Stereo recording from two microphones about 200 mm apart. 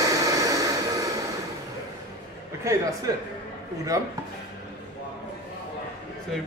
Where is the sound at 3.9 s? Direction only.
15° right (ahead or behind).